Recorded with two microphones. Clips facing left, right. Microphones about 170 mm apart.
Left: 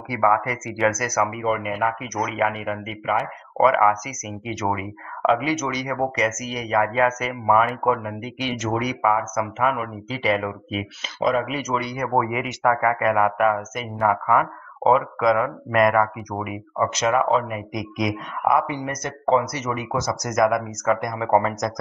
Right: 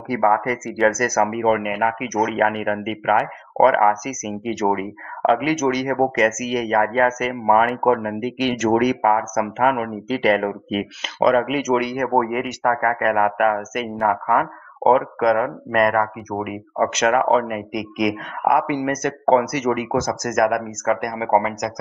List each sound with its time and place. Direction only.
0.1 s speech: 45° right (ahead or behind)
1.1 s speech: 55° right (ahead or behind); by 2.1 s 70° right (ahead or behind)
2.2 s speech: 55° right (ahead or behind)
3.5 s speech: 50° right (ahead or behind)
4.6 s speech: 40° right (ahead or behind)
5.5 s speech: 50° right (ahead or behind)
6.8 s speech: 45° right (ahead or behind)